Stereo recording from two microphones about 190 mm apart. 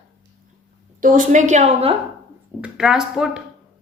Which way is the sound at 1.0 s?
45° right (ahead or behind).